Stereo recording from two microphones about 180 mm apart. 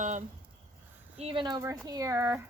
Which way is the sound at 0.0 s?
45° right (ahead or behind).